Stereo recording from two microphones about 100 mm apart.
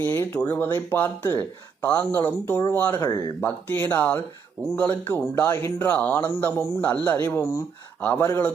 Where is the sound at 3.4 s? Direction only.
20° left (ahead or behind).